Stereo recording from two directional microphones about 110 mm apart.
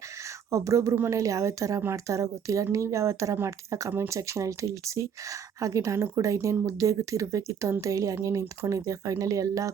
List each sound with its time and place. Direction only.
0.5 s speech: 30° right (ahead or behind)